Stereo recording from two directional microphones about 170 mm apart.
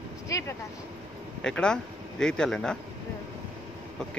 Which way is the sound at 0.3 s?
15° left (ahead or behind).